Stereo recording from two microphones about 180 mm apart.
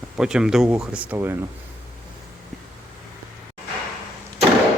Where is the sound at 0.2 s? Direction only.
5° right (ahead or behind).